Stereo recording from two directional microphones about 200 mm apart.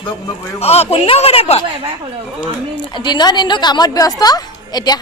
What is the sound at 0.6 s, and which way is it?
Speech, 30° left (ahead or behind).